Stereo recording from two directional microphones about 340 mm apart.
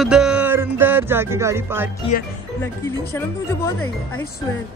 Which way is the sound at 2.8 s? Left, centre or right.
Centre.